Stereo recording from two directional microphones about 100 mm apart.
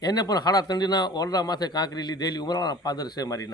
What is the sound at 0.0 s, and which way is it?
A man's voice, 40° left (ahead or behind).